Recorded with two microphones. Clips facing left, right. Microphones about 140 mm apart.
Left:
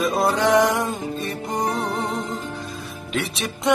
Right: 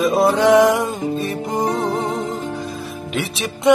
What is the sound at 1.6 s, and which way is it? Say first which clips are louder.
Music: right 4 dB; 30° right (ahead or behind).